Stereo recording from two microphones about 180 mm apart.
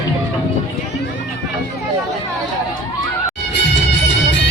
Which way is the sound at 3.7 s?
80° left.